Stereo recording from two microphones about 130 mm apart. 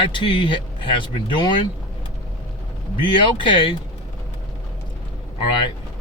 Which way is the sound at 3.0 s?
40° left (ahead or behind).